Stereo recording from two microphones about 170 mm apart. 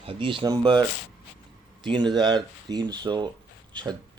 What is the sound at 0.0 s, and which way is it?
A man's voice, 30° right (ahead or behind).